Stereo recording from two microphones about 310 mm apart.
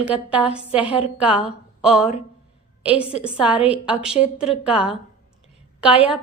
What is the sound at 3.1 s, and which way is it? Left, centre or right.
Speech, centre.